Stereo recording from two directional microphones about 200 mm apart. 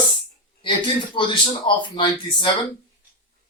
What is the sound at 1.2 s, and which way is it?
Speech, 25° left (ahead or behind).